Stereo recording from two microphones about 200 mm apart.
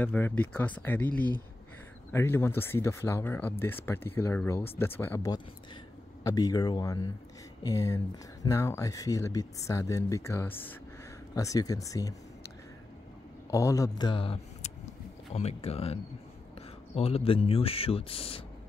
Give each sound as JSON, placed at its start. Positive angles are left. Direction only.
{"t": 0.0, "sound": "speech", "side_deg": 10}